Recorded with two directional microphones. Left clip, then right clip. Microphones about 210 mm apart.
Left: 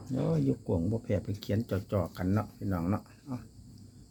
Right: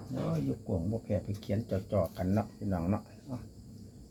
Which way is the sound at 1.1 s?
45° left (ahead or behind).